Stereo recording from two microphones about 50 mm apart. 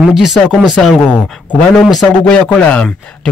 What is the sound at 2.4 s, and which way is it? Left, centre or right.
Speech, left.